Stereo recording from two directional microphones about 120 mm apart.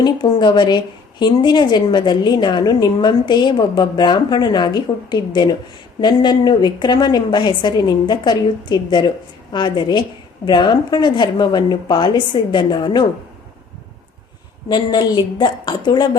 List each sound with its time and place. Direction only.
0.0 s a woman's voice: 35° left (ahead or behind)
14.7 s a woman's voice: 35° left (ahead or behind)